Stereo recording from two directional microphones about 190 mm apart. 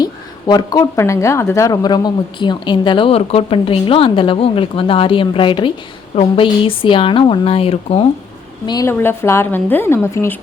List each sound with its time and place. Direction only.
0.0 s a woman's voice: 20° left (ahead or behind)
8.6 s a woman's voice: 20° left (ahead or behind)